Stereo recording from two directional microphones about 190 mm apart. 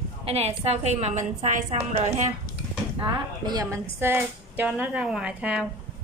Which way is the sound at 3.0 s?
20° right (ahead or behind).